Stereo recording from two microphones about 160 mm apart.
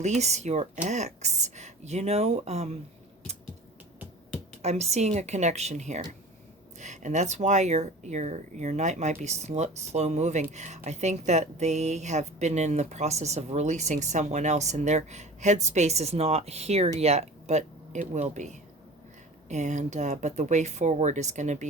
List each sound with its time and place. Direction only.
0.0 s speech: 45° right (ahead or behind)
4.6 s speech: 45° right (ahead or behind)